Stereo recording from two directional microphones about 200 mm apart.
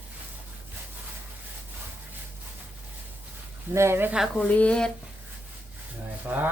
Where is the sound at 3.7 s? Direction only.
15° right (ahead or behind); by 4.9 s 5° left (ahead or behind).